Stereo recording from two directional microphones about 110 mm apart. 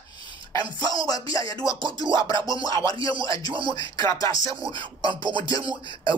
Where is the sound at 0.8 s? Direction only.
35° left (ahead or behind).